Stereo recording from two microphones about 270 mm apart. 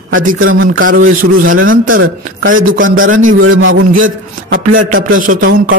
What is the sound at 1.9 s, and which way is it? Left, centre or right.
Speech, right.